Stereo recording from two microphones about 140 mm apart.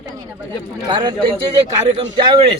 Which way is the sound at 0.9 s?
35° right (ahead or behind).